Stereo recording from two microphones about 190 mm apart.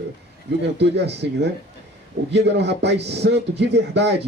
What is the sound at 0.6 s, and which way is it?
Speech, 65° right (ahead or behind).